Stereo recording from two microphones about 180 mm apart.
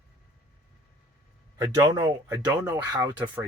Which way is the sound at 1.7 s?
20° right (ahead or behind).